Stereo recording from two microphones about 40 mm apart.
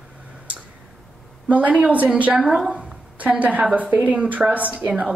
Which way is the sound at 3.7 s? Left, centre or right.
Right.